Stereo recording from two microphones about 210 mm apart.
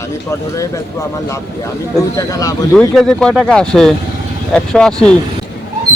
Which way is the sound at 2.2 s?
15° left (ahead or behind).